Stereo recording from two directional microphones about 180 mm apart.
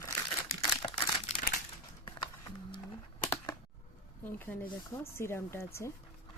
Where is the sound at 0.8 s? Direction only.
25° left (ahead or behind).